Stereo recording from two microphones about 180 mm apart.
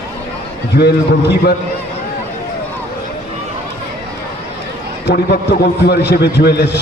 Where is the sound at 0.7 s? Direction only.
60° left (ahead or behind).